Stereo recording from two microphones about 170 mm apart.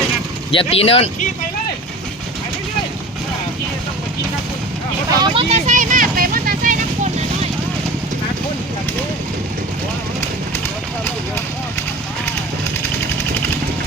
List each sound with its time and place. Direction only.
0.5 s speech: 35° left (ahead or behind)
5.1 s vehicle: 30° right (ahead or behind); by 7.1 s 50° right (ahead or behind)